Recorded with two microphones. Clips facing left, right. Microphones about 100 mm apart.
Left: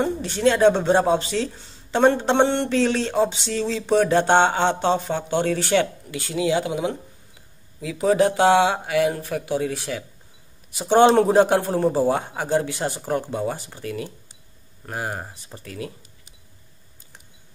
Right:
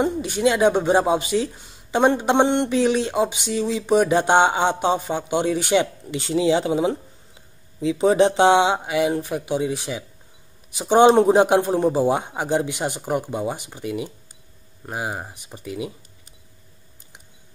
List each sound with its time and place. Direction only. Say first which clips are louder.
0.0 s speech: even; 10° right (ahead or behind)